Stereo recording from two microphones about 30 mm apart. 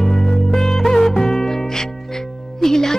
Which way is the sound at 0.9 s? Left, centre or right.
Centre.